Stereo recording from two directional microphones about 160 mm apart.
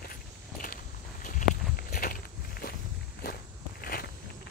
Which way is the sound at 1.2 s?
65° left (ahead or behind).